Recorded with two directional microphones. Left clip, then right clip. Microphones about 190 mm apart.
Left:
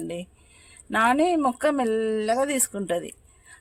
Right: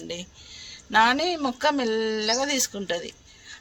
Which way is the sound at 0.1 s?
55° left (ahead or behind).